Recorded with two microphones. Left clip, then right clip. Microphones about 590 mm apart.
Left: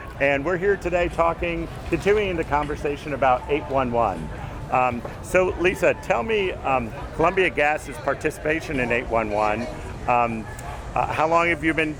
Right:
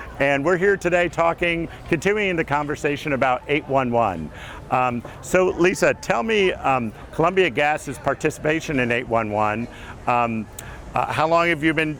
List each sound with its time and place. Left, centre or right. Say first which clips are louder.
0.2 s speech: right 3 dB; right
4.7 s speech: even; right